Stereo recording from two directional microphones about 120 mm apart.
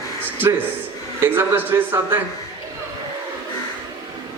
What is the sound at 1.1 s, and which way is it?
A man's voice, 20° right (ahead or behind).